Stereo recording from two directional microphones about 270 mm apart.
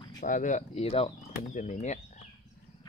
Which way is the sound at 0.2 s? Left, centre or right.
Left.